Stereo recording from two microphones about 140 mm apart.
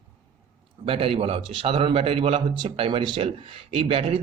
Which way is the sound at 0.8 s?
40° right (ahead or behind).